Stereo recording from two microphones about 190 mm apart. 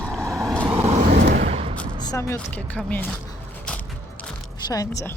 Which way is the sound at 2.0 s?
20° left (ahead or behind).